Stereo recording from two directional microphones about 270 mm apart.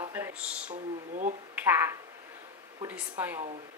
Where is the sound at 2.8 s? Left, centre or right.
Centre.